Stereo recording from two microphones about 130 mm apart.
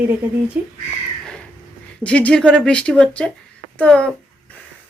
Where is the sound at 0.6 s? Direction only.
15° right (ahead or behind).